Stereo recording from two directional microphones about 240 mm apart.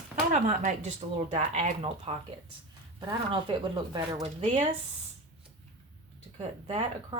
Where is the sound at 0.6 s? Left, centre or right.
Right.